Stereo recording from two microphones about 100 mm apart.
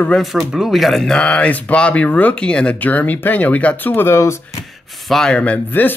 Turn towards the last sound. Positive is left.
turn(degrees=20)  # may be behind; listen again after turning